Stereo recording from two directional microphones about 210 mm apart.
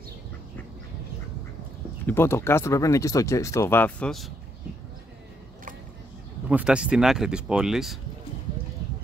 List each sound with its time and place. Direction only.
2.0 s speech: 10° left (ahead or behind)
6.5 s speech: 5° right (ahead or behind)